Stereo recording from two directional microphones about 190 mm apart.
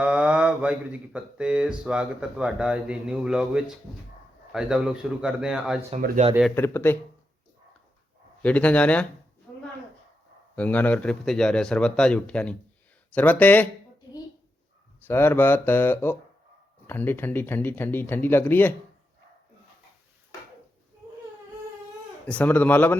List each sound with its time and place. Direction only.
0.0 s speech: 5° right (ahead or behind)
6.2 s speech: 40° right (ahead or behind)
6.6 s speech: 10° left (ahead or behind)
8.4 s speech: 5° left (ahead or behind)
9.5 s a sound: 10° left (ahead or behind)
10.5 s speech: 10° left (ahead or behind)
15.0 s speech: 10° left (ahead or behind)
22.3 s speech: 10° left (ahead or behind)